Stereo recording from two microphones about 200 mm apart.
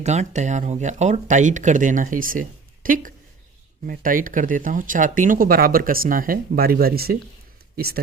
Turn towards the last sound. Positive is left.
turn(degrees=-50)  # may be behind; listen again after turning